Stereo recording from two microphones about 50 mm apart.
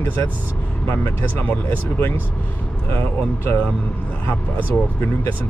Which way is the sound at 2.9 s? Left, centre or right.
Left.